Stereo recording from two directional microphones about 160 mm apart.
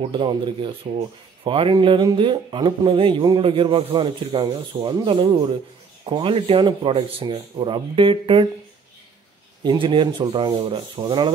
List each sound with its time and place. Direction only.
0.0 s speech: 30° right (ahead or behind)
9.6 s speech: 30° right (ahead or behind)